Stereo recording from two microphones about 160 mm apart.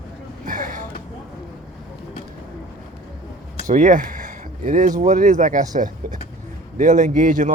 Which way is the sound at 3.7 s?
50° right (ahead or behind).